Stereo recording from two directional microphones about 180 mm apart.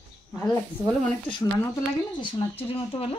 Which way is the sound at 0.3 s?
10° left (ahead or behind).